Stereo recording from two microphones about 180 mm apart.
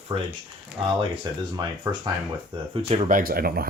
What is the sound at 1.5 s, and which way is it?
Speech, 20° right (ahead or behind).